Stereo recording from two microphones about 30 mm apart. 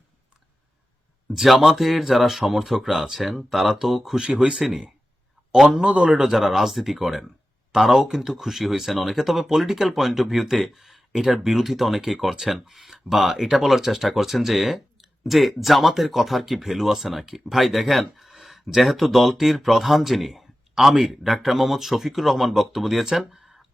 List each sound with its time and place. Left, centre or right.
1.5 s speech: centre
4.2 s speech: right
4.6 s speech: centre
6.1 s speech: centre
23.1 s a sound: centre